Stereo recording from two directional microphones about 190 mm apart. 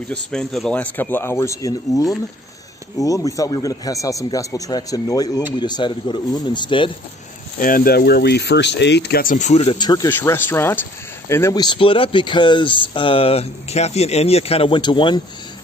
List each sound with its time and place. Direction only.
0.1 s speech: 5° left (ahead or behind); by 6.9 s 25° left (ahead or behind)
7.6 s speech: 50° left (ahead or behind); by 15.1 s 25° left (ahead or behind)